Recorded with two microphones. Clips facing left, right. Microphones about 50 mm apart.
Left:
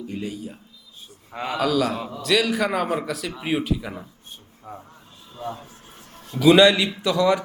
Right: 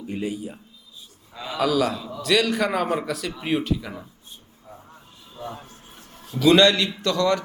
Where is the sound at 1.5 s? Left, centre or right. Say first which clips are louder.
Even; centre.